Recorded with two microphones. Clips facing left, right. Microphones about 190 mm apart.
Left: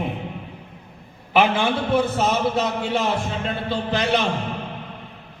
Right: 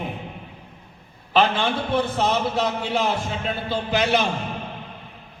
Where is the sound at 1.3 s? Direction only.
10° left (ahead or behind).